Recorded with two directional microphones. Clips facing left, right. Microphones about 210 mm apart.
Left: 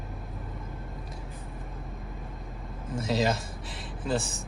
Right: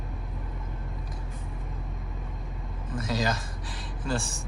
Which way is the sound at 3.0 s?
25° left (ahead or behind).